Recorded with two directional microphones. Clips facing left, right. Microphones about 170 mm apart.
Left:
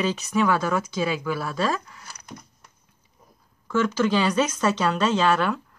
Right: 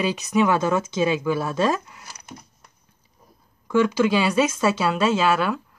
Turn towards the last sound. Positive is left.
turn(degrees=-5)  # may be behind; listen again after turning